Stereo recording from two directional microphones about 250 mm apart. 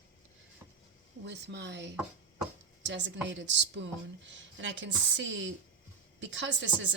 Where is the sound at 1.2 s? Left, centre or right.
Right.